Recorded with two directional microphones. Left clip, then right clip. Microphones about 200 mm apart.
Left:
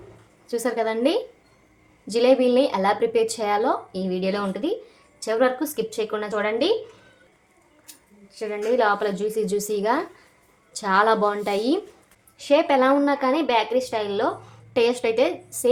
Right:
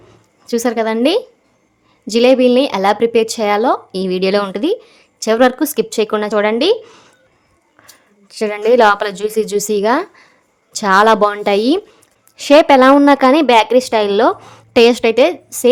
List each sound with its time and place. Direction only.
0.4 s a woman's voice: 45° right (ahead or behind)
8.3 s a woman's voice: 60° right (ahead or behind)
12.4 s a woman's voice: 60° right (ahead or behind); by 15.7 s 45° right (ahead or behind)